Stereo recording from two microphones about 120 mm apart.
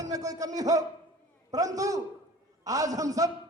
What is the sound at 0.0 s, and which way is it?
A man's voice, 30° right (ahead or behind).